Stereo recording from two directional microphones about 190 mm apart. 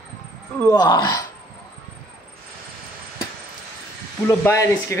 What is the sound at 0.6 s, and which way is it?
Speech, 20° left (ahead or behind).